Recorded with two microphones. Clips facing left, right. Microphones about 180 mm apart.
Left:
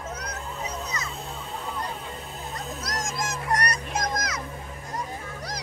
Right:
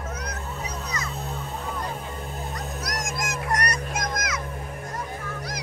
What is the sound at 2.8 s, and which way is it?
Music, 30° left (ahead or behind).